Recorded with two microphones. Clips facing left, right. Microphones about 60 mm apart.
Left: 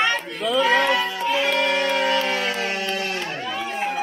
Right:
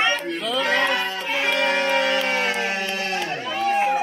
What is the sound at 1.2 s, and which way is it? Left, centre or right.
Music, centre.